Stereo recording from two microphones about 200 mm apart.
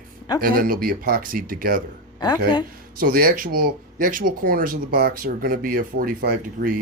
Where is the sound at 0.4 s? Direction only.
45° right (ahead or behind).